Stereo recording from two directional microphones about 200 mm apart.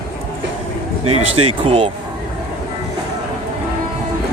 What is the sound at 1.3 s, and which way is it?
Speech, 30° right (ahead or behind).